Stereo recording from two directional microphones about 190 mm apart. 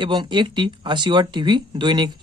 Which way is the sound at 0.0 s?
25° right (ahead or behind).